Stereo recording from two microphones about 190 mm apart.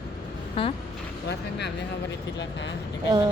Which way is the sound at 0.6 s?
30° left (ahead or behind).